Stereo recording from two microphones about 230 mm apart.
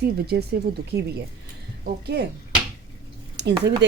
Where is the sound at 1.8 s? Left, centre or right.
Right.